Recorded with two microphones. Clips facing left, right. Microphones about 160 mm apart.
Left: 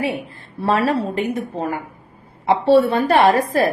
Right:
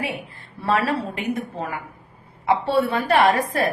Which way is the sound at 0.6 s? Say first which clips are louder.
Left 4 dB; 30° left (ahead or behind).